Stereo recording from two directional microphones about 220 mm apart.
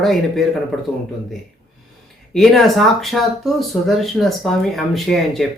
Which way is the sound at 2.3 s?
Centre (ahead or behind).